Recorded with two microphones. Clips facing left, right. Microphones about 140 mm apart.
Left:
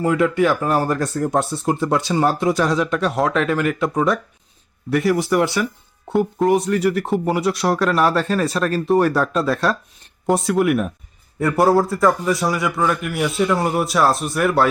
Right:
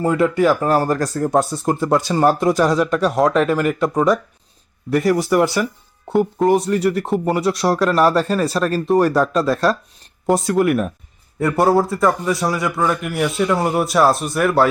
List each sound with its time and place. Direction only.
0.0 s speech: centre (ahead or behind)
0.9 s speech: 35° right (ahead or behind)
1.1 s speech: centre (ahead or behind)